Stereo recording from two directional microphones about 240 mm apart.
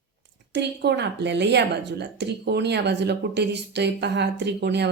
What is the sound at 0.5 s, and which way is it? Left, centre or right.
A woman's voice, right.